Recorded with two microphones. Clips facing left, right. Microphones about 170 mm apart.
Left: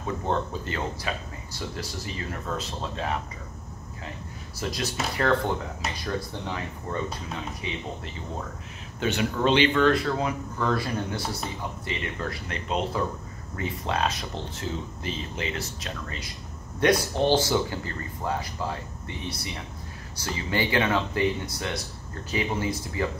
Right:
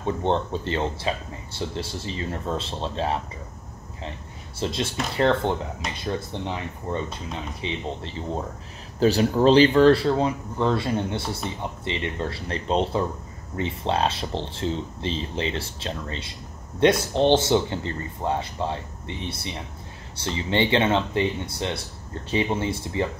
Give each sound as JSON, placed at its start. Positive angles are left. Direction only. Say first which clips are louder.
{"t": 0.0, "sound": "speech", "louder": "right 4 dB", "side_deg": -30}
{"t": 4.6, "sound": "speech", "louder": "right 3 dB", "side_deg": -25}